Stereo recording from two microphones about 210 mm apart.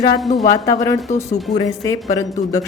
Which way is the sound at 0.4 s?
15° left (ahead or behind).